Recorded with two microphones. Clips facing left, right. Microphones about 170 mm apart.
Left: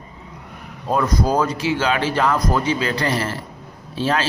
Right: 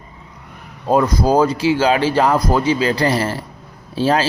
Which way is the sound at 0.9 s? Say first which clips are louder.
Right 4 dB; 30° right (ahead or behind).